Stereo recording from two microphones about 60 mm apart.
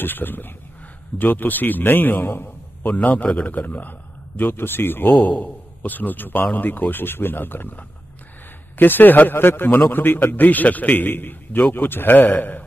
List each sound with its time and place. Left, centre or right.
0.0 s a man's voice: left